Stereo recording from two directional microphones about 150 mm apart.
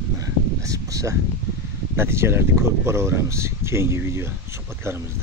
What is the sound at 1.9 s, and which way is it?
Speech, 15° right (ahead or behind).